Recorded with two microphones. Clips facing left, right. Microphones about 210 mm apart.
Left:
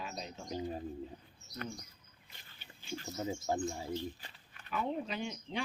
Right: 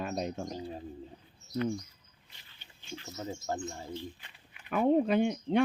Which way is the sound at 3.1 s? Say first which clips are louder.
Left 1 dB; 5° left (ahead or behind).